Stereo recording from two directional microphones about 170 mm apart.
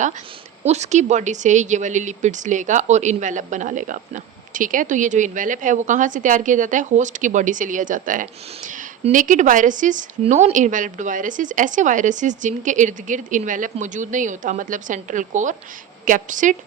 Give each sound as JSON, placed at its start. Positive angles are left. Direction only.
{"t": 0.7, "sound": "speech", "side_deg": -45}